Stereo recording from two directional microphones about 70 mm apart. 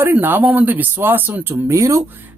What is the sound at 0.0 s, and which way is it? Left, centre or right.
Speech, right.